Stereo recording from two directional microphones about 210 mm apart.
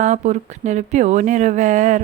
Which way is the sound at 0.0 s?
35° right (ahead or behind).